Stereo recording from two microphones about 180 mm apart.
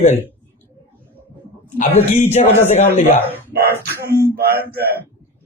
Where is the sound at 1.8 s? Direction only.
40° left (ahead or behind).